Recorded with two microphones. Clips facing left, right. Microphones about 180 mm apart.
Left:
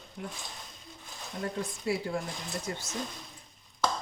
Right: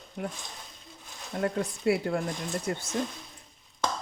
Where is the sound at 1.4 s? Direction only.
60° right (ahead or behind).